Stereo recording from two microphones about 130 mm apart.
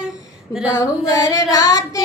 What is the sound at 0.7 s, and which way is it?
Child singing, 30° left (ahead or behind).